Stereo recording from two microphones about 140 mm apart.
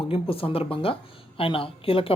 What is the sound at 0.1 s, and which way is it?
Speech, 40° left (ahead or behind).